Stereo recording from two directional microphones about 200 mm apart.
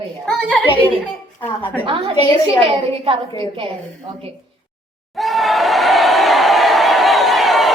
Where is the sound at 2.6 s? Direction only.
25° right (ahead or behind).